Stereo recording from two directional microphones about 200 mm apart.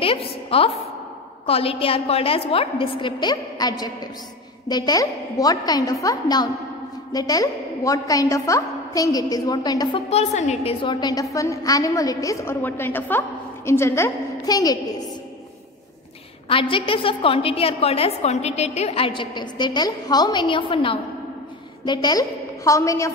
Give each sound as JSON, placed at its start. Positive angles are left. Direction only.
{"t": 0.0, "sound": "a woman's voice", "side_deg": 30}
{"t": 16.4, "sound": "a woman's voice", "side_deg": 25}